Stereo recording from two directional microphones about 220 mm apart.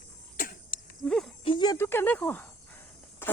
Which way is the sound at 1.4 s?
20° left (ahead or behind).